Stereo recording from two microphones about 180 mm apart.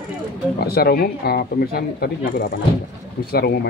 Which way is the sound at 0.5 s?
60° left (ahead or behind).